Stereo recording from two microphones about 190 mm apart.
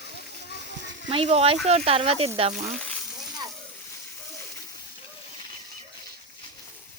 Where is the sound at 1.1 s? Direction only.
30° right (ahead or behind).